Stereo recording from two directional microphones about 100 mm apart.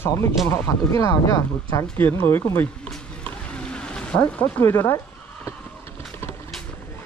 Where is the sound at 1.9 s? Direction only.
20° left (ahead or behind).